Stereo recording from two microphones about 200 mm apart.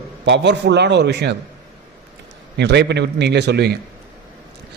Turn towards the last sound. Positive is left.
turn(degrees=-55)  # may be behind; listen again after turning